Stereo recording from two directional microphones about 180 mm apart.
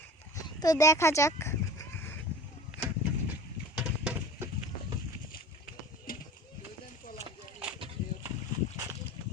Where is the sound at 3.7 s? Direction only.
5° right (ahead or behind).